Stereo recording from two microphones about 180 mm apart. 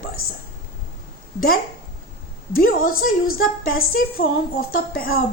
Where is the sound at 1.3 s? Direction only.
55° left (ahead or behind).